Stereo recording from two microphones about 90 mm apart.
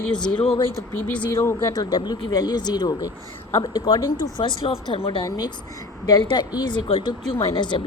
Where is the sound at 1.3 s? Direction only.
40° left (ahead or behind); by 5.2 s 75° left (ahead or behind).